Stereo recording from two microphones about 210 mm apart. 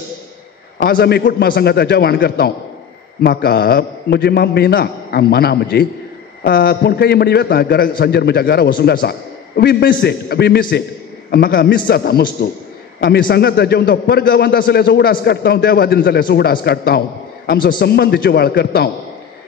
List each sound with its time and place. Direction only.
0.7 s a man's voice: 50° left (ahead or behind)